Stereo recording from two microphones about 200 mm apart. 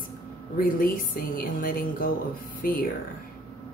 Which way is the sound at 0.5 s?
45° left (ahead or behind).